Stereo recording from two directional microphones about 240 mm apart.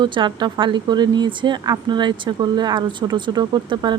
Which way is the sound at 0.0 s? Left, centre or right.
Centre.